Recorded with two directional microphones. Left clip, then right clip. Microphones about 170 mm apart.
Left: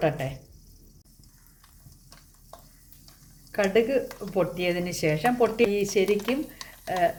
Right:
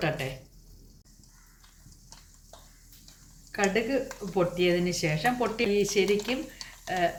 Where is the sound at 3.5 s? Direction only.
65° left (ahead or behind).